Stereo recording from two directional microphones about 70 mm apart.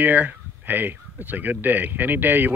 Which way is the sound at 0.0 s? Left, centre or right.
Right.